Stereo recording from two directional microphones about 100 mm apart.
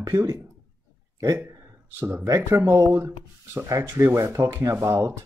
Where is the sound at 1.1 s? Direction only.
35° right (ahead or behind).